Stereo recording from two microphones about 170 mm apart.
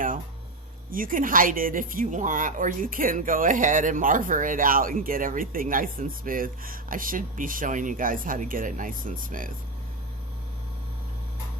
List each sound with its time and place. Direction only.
0.9 s speech: 55° right (ahead or behind)